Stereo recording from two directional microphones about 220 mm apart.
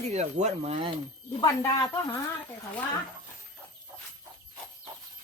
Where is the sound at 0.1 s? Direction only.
30° right (ahead or behind).